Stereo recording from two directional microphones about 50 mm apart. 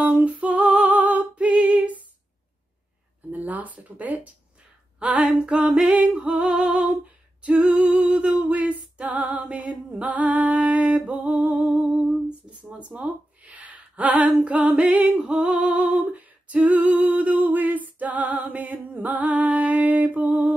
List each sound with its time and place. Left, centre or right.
0.0 s female singing: right
3.3 s speech: right
5.0 s a sound: centre